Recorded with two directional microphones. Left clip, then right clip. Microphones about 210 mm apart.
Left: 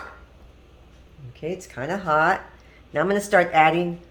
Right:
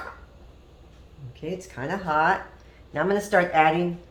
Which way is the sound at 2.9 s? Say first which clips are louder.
Left 3 dB; 50° left (ahead or behind).